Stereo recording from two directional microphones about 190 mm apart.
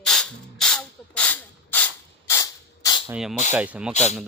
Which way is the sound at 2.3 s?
15° left (ahead or behind).